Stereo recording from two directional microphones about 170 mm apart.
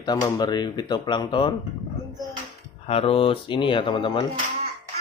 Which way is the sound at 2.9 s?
35° left (ahead or behind).